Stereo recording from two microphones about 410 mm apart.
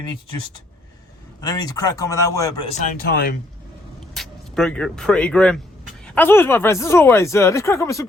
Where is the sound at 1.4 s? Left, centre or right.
Centre.